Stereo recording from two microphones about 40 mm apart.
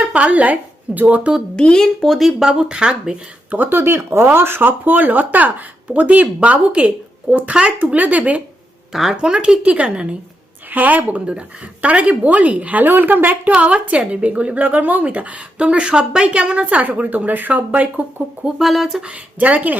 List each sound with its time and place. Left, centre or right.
0.1 s speech: right
1.5 s speech: centre
2.0 s speech: centre
2.4 s a woman's voice: centre
3.7 s a woman's voice: right
8.9 s speech: centre
9.1 s a woman's voice: right
10.7 s speech: right
11.3 s a woman's voice: right
13.6 s a woman's voice: right
16.8 s a woman's voice: right
18.6 s speech: centre
19.0 s a woman's voice: right